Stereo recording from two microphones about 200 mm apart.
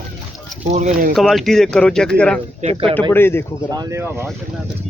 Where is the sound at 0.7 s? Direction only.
35° right (ahead or behind).